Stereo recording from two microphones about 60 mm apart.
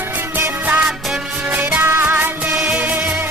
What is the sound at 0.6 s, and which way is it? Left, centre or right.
Music, right.